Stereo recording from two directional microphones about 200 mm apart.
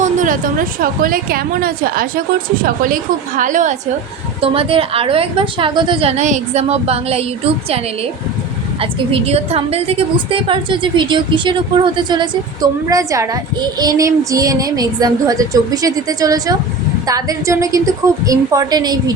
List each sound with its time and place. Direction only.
0.0 s a woman's voice: 40° right (ahead or behind)
4.4 s a woman's voice: 30° right (ahead or behind)
8.8 s a woman's voice: 30° right (ahead or behind)